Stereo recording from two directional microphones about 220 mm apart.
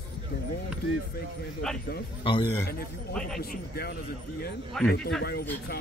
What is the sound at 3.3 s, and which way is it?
Speech, 45° left (ahead or behind).